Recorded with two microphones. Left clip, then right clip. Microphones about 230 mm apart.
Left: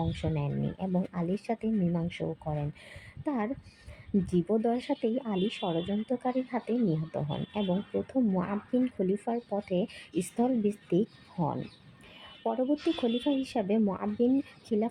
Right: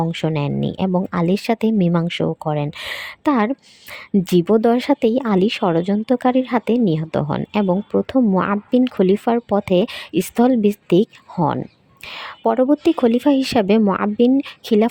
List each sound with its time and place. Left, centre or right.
0.1 s a woman's voice: right